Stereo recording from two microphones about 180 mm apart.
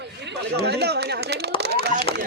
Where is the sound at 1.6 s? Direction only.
65° right (ahead or behind).